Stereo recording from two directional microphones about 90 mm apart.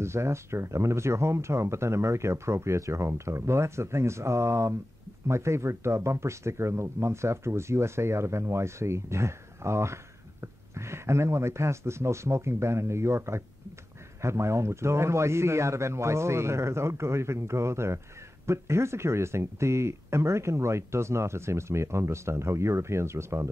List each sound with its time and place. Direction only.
0.0 s speech: 30° right (ahead or behind)